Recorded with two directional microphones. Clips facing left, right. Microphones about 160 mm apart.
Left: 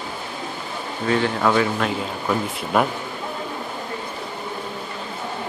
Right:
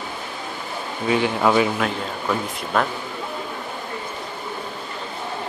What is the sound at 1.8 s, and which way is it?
Speech, 5° left (ahead or behind).